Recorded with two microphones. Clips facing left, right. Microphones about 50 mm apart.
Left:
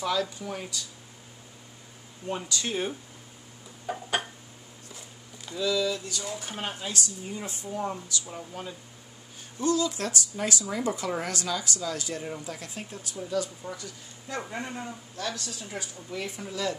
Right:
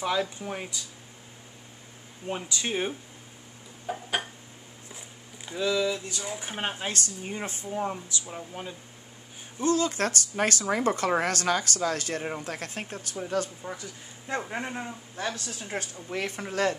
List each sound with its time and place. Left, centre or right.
0.0 s speech: right
2.2 s speech: right
3.8 s a sound: centre
4.8 s speech: right
6.9 s speech: right; by 8.7 s centre
9.6 s a woman's voice: right
13.7 s speech: right
15.6 s a woman's voice: right